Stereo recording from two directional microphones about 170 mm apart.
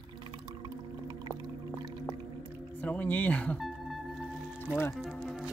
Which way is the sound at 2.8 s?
10° left (ahead or behind).